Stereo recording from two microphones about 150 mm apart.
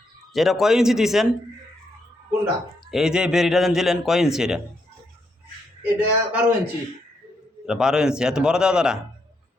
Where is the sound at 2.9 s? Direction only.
5° right (ahead or behind).